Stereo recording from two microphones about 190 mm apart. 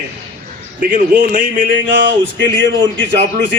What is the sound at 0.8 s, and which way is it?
A man's voice, 45° right (ahead or behind).